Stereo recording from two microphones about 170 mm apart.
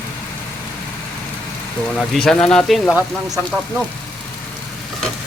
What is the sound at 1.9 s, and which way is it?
Speech, centre (ahead or behind).